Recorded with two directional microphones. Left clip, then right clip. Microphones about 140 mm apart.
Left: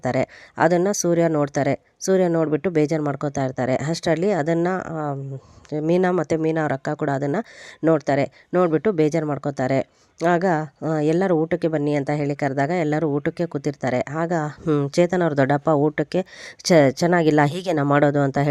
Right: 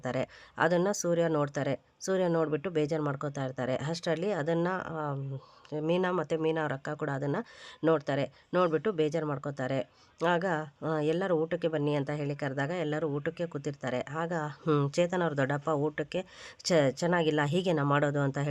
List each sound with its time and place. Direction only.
0.0 s speech: 45° left (ahead or behind)
5.9 s speech: 50° left (ahead or behind)
14.6 s speech: 25° left (ahead or behind)
14.8 s speech: 45° left (ahead or behind)